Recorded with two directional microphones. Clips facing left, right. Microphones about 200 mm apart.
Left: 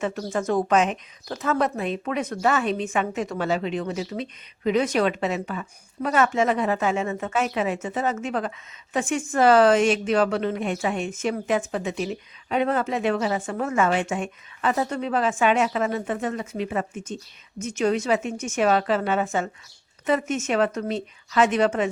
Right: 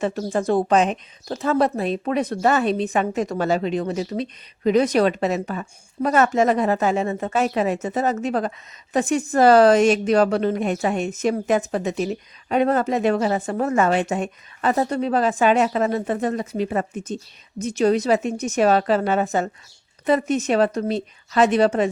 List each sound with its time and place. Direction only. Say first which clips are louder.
0.0 s speech: right 4 dB; 35° right (ahead or behind)